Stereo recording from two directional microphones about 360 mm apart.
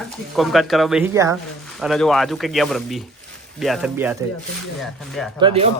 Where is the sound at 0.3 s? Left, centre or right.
Centre.